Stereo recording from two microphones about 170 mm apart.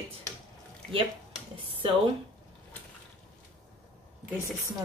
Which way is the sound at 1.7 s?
30° right (ahead or behind).